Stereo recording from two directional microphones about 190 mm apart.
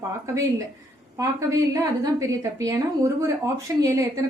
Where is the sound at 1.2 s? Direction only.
15° right (ahead or behind).